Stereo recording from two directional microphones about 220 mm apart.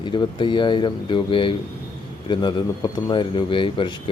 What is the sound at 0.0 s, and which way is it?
A man's voice, 20° left (ahead or behind).